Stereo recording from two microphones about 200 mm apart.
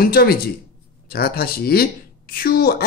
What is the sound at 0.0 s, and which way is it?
Speech, 50° left (ahead or behind).